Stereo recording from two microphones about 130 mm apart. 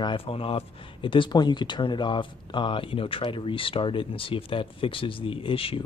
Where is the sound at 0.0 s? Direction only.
40° left (ahead or behind).